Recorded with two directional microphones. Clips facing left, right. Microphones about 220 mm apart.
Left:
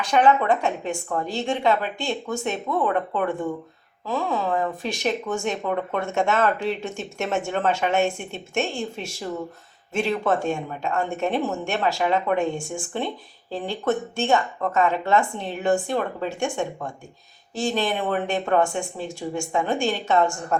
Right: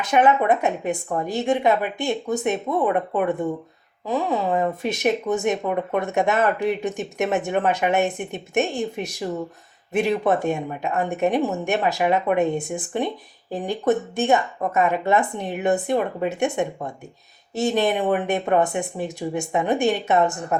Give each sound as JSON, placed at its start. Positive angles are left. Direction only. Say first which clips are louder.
{"t": 0.0, "sound": "a woman's voice", "louder": "right 1 dB", "side_deg": -20}